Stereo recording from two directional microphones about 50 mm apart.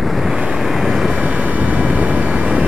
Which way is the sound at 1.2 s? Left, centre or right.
Right.